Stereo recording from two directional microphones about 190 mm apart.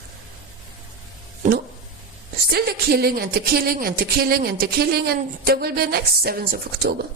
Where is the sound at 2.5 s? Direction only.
55° right (ahead or behind).